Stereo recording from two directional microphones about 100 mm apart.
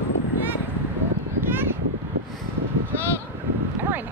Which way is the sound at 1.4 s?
20° right (ahead or behind).